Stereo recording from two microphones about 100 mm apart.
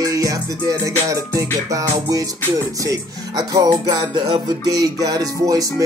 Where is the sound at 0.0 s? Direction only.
35° right (ahead or behind).